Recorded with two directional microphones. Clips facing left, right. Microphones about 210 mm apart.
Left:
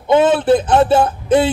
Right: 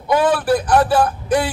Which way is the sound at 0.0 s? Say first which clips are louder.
Left 4 dB; 25° left (ahead or behind).